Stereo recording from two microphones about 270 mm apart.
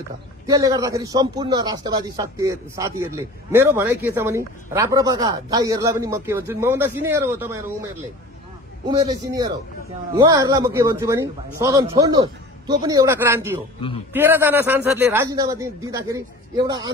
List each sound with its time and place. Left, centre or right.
0.5 s speech: centre
13.7 s a man's voice: centre
14.1 s speech: centre